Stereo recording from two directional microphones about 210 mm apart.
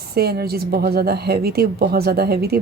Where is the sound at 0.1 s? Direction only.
50° right (ahead or behind).